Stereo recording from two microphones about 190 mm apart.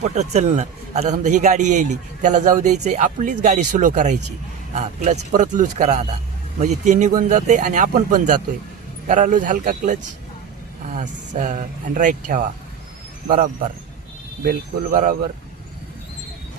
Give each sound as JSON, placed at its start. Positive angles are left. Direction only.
{"t": 0.0, "sound": "a man's voice", "side_deg": -35}
{"t": 11.0, "sound": "speech", "side_deg": -40}